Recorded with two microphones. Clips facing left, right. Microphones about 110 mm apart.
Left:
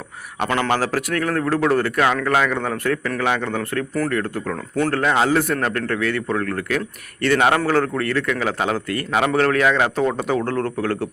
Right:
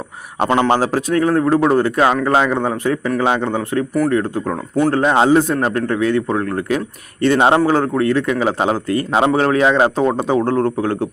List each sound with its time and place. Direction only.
0.3 s a man's voice: 30° right (ahead or behind)